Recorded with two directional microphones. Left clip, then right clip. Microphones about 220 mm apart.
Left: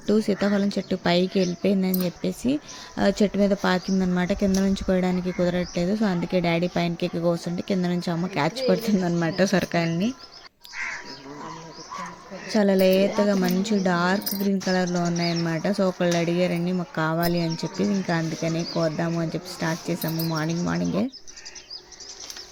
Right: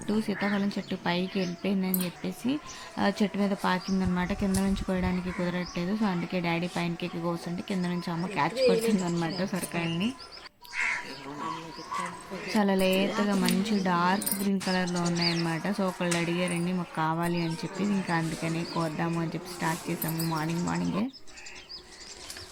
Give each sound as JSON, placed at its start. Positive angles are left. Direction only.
{"t": 0.1, "sound": "speech", "side_deg": 25}
{"t": 9.4, "sound": "speech", "side_deg": 35}
{"t": 12.5, "sound": "speech", "side_deg": 20}